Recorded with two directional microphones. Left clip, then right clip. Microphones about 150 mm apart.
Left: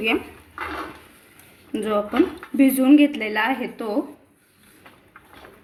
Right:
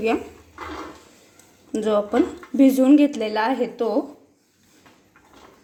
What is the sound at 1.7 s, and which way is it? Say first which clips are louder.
Speech: right 1 dB; 15° right (ahead or behind).